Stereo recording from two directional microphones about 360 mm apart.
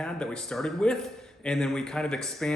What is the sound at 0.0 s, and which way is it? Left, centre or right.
A man's voice, centre.